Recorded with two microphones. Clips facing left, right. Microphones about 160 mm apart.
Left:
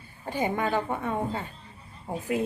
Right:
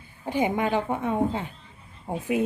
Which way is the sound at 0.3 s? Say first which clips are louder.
Right 3 dB; 15° right (ahead or behind).